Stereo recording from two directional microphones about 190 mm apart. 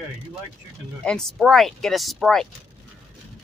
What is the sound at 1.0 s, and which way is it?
Speech, centre (ahead or behind).